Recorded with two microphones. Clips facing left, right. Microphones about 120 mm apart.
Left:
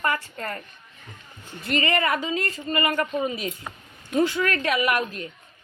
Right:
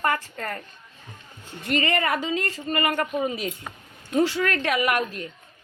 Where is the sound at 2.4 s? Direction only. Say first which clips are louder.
Even; 30° right (ahead or behind).